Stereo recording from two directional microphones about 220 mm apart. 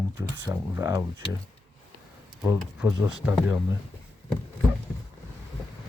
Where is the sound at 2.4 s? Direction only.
5° right (ahead or behind).